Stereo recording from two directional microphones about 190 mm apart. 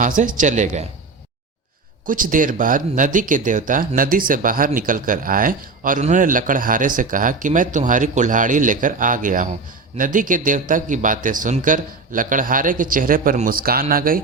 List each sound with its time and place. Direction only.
0.0 s speech: 45° right (ahead or behind)
2.0 s speech: 45° right (ahead or behind)